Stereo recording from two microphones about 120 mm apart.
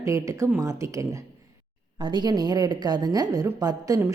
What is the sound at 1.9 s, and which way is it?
A woman's voice, 40° right (ahead or behind).